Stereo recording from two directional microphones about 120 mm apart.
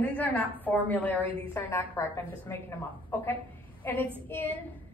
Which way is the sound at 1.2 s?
45° right (ahead or behind).